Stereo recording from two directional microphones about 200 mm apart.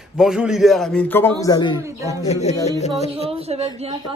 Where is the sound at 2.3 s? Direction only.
35° left (ahead or behind).